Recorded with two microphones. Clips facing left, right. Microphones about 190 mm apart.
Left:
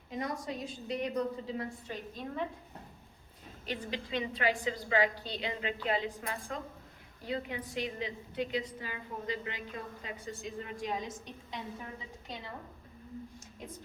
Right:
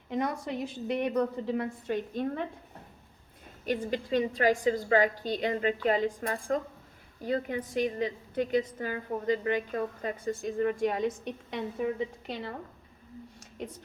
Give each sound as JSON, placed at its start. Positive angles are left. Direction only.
{"t": 0.1, "sound": "a woman's voice", "side_deg": -60}
{"t": 3.7, "sound": "a woman's voice", "side_deg": -50}
{"t": 13.6, "sound": "a woman's voice", "side_deg": -70}